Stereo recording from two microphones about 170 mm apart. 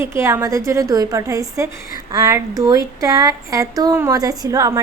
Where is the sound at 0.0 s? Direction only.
15° right (ahead or behind).